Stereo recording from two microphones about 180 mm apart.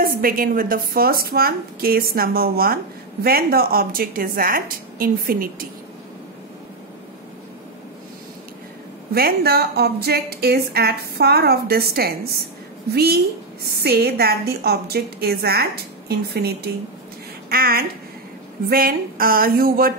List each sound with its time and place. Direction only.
0.0 s a woman's voice: 55° right (ahead or behind)
9.1 s a woman's voice: 60° right (ahead or behind)